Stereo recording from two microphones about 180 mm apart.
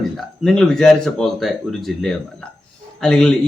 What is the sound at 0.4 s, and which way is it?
A man's voice, 5° left (ahead or behind).